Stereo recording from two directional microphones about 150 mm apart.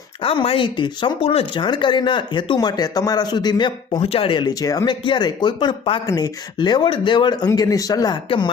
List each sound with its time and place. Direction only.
0.2 s speech: 35° left (ahead or behind)
4.0 s speech: 40° left (ahead or behind)